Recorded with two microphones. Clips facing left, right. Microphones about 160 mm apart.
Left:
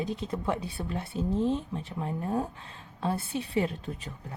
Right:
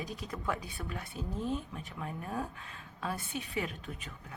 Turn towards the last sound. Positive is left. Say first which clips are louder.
# left 6 dB
turn(degrees=35)  # may be behind; listen again after turning